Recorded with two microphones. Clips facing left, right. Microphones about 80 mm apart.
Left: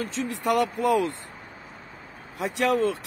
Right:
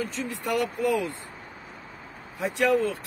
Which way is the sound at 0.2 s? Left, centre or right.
Left.